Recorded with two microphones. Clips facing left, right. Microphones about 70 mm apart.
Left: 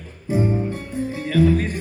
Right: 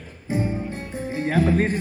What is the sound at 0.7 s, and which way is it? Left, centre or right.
Music, right.